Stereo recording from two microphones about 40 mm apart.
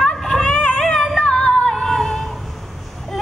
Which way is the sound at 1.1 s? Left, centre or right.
Left.